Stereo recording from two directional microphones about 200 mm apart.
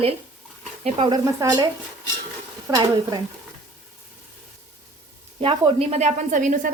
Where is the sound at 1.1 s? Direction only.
15° right (ahead or behind).